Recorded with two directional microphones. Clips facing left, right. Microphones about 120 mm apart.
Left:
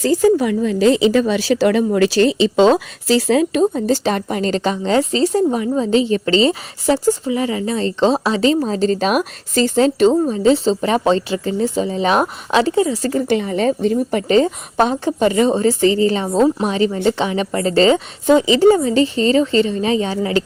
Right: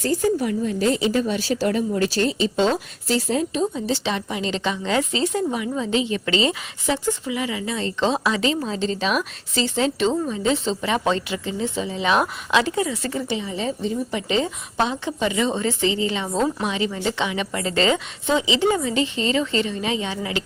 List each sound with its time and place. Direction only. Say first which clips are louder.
0.0 s a woman's voice: left 7 dB; 90° left
3.6 s a woman's voice: left 7 dB; 50° left (ahead or behind); by 13.1 s 30° left (ahead or behind)
13.1 s a woman's voice: left 11 dB; 55° left (ahead or behind); by 20.4 s 40° left (ahead or behind)